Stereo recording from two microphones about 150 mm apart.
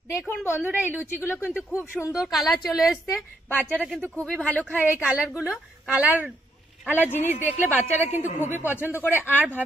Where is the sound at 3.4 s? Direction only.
10° left (ahead or behind).